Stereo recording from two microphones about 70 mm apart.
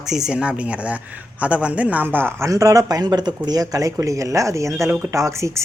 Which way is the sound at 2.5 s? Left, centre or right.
Right.